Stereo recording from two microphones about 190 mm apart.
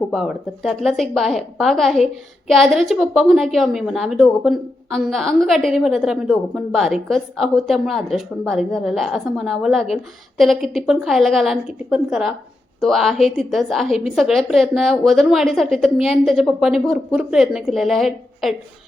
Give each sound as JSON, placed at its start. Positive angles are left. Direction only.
{"t": 0.1, "sound": "a woman's voice", "side_deg": 0}